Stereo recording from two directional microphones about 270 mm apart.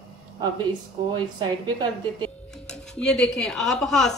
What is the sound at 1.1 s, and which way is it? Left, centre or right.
A woman's voice, centre.